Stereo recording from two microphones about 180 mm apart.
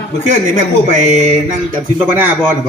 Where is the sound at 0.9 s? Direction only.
40° right (ahead or behind).